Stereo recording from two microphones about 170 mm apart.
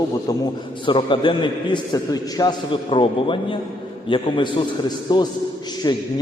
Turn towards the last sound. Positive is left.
turn(degrees=25)  # may be behind; listen again after turning